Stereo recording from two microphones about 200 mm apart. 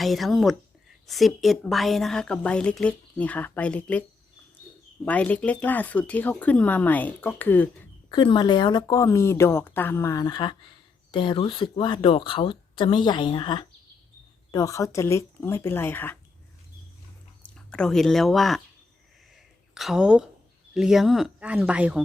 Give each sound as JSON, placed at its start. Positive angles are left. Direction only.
{"t": 0.0, "sound": "a woman's voice", "side_deg": 0}
{"t": 5.0, "sound": "speech", "side_deg": 5}
{"t": 8.1, "sound": "speech", "side_deg": 20}
{"t": 17.4, "sound": "speech", "side_deg": 5}
{"t": 19.7, "sound": "a woman's voice", "side_deg": 0}